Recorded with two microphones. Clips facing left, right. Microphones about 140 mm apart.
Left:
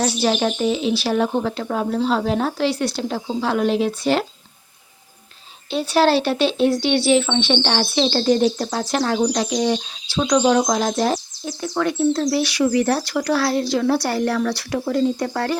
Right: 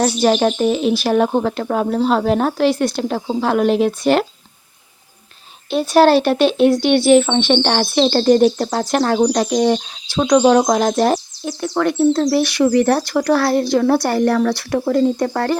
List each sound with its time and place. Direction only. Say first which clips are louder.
0.0 s speech: right 5 dB; 45° right (ahead or behind)
5.7 s speech: right 5 dB; 45° right (ahead or behind)